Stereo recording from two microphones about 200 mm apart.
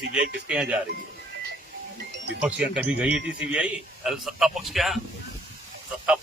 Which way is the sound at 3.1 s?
65° right (ahead or behind).